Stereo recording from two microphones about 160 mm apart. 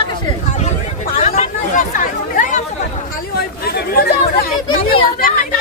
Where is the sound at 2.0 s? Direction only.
55° left (ahead or behind).